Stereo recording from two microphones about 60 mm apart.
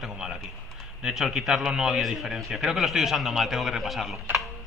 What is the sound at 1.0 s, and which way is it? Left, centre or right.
A man's voice, centre.